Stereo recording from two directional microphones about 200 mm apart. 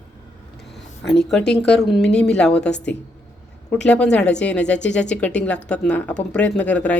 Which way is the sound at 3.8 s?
5° left (ahead or behind).